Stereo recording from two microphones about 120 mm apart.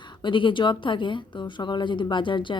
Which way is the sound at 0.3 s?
45° left (ahead or behind).